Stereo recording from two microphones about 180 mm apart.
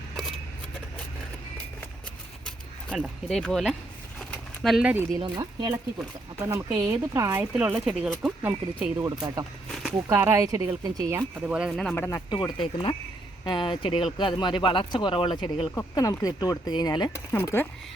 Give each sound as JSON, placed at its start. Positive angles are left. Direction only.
{"t": 3.0, "sound": "speech", "side_deg": 0}
{"t": 5.1, "sound": "speech", "side_deg": -25}
{"t": 6.5, "sound": "speech", "side_deg": -10}
{"t": 9.2, "sound": "speech", "side_deg": -20}
{"t": 11.4, "sound": "speech", "side_deg": -5}
{"t": 12.0, "sound": "speech", "side_deg": 20}
{"t": 15.7, "sound": "speech", "side_deg": 15}
{"t": 17.3, "sound": "speech", "side_deg": 10}